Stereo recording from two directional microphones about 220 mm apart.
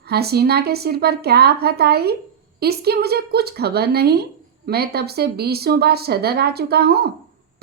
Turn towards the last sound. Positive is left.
turn(degrees=-45)  # may be behind; listen again after turning